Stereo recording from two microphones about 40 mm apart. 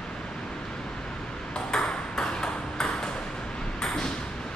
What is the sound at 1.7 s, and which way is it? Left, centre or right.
Ping, centre.